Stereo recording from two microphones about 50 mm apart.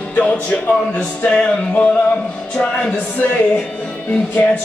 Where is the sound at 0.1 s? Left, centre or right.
Left.